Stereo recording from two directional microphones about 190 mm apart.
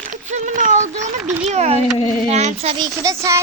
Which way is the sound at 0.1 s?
40° right (ahead or behind).